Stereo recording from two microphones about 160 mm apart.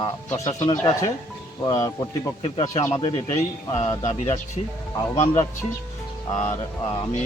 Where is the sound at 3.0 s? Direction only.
40° left (ahead or behind).